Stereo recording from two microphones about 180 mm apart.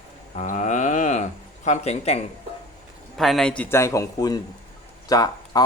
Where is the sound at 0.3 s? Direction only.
40° left (ahead or behind).